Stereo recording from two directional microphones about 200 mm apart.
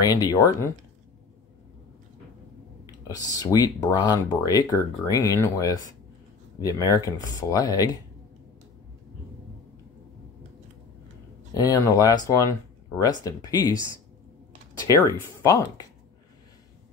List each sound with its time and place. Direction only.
0.0 s speech: 20° left (ahead or behind)
2.9 s speech: 20° left (ahead or behind)
11.5 s speech: 20° left (ahead or behind)
15.4 s speech: 15° left (ahead or behind)